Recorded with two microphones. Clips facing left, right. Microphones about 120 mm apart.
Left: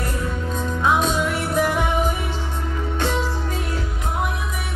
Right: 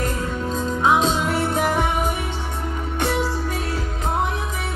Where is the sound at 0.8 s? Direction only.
25° right (ahead or behind).